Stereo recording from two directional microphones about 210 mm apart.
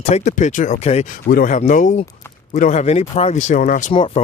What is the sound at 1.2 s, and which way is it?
Speech, 40° left (ahead or behind).